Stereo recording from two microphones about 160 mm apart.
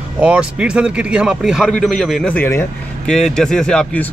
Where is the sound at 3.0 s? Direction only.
5° left (ahead or behind).